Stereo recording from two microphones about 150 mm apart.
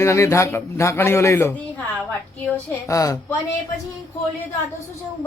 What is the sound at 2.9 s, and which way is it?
Speech, 20° left (ahead or behind).